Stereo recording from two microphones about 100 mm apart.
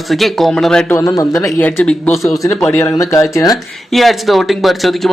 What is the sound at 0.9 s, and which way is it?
Speech, 35° left (ahead or behind).